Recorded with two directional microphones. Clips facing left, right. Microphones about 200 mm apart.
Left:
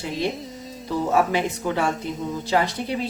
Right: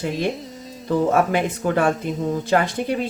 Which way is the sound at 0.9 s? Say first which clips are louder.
Right 3 dB; 55° right (ahead or behind).